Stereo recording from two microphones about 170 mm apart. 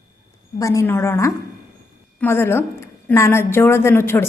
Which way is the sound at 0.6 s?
15° left (ahead or behind).